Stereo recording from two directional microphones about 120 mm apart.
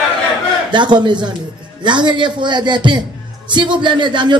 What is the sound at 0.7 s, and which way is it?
A man's voice, 40° right (ahead or behind).